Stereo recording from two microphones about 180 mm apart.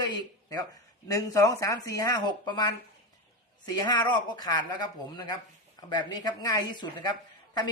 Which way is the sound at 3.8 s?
25° left (ahead or behind).